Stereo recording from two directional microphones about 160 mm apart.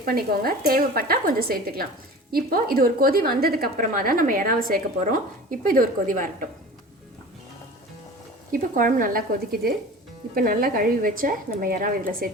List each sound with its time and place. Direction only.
0.0 s a woman's voice: 70° right (ahead or behind)
8.5 s a woman's voice: 60° right (ahead or behind)